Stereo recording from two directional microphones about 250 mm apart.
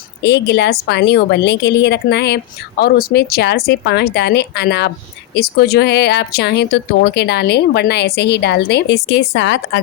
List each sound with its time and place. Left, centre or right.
0.2 s a woman's voice: left